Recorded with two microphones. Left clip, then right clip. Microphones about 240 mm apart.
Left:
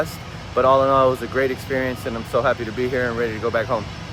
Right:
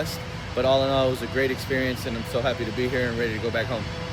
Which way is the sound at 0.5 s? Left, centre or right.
Left.